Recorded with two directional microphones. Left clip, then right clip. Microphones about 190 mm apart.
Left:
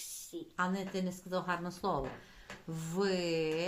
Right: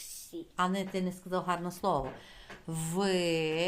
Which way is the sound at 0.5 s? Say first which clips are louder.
Right 4 dB; 35° right (ahead or behind).